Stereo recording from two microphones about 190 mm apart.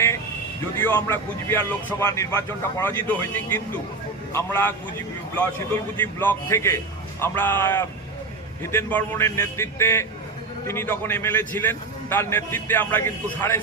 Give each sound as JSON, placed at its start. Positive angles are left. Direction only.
{"t": 0.8, "sound": "a man's voice", "side_deg": 10}